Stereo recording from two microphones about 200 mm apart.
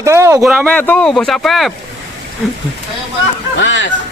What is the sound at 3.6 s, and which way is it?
Speech, 65° left (ahead or behind).